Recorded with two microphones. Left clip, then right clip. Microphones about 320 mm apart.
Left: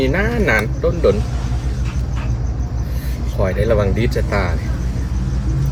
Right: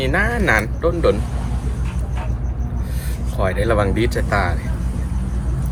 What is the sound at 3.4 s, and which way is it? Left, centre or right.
Speech, right.